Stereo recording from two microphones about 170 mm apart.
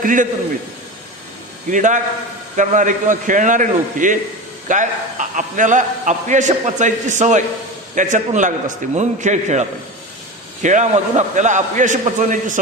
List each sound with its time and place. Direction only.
0.0 s a man's voice: 50° right (ahead or behind)
1.7 s a man's voice: 50° right (ahead or behind)